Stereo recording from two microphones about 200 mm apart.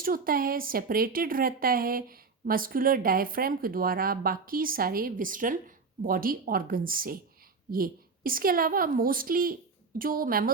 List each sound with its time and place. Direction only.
0.0 s speech: 45° right (ahead or behind)